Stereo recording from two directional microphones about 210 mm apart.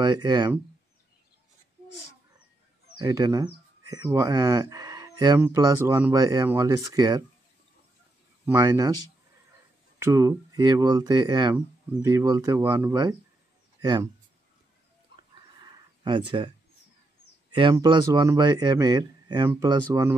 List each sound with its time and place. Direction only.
0.0 s speech: 20° right (ahead or behind)
3.0 s speech: 15° right (ahead or behind)
8.5 s speech: 15° right (ahead or behind)
9.9 s speech: 10° right (ahead or behind)
15.6 s a sound: 20° right (ahead or behind)
17.5 s speech: 20° right (ahead or behind)